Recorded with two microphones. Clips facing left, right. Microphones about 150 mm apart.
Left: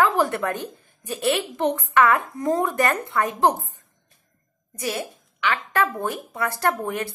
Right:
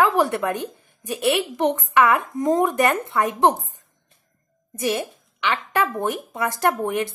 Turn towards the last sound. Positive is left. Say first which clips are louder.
# right 3 dB
turn(degrees=-20)  # may be behind; listen again after turning